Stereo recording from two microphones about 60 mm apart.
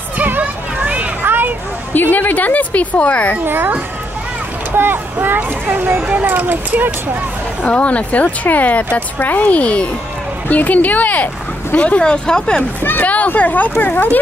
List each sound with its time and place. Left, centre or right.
0.2 s children playing: right
1.2 s a sound: right
2.0 s a woman's voice: left
3.3 s speech: right
7.6 s a woman's voice: left
12.0 s speech: centre
12.8 s a woman's voice: left